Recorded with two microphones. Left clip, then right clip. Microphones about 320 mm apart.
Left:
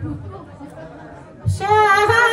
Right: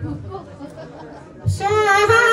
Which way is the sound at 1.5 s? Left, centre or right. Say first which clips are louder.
Left 2 dB; centre.